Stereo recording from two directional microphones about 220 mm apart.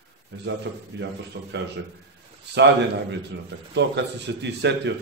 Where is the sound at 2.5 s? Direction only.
50° right (ahead or behind).